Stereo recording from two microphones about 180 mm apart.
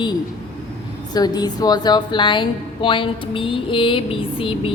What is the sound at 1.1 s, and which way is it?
A woman's voice, 20° left (ahead or behind).